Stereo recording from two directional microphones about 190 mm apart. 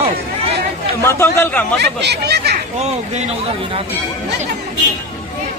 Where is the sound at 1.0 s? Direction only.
15° left (ahead or behind).